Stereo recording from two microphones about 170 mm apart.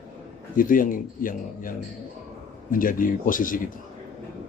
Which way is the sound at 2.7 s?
55° left (ahead or behind).